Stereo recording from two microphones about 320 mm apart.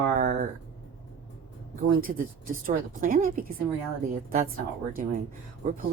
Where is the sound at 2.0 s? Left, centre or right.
Right.